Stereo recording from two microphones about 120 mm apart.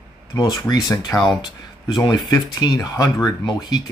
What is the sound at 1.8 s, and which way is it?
Speech, 35° left (ahead or behind).